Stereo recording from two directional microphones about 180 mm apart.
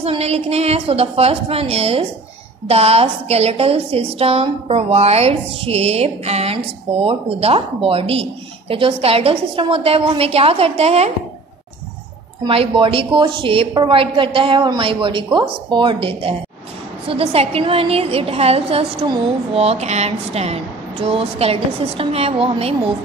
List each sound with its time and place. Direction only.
0.0 s a woman's voice: 35° right (ahead or behind)
12.4 s a woman's voice: 30° right (ahead or behind)